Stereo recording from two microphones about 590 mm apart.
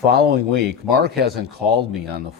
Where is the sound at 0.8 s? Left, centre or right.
Centre.